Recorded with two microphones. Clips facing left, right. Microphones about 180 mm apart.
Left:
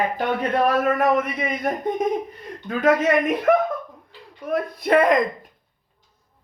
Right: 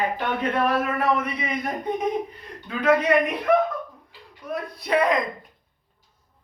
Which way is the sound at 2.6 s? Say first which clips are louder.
Left 2 dB; 45° left (ahead or behind).